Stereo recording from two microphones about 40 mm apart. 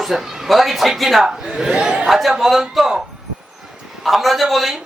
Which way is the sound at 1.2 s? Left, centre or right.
Centre.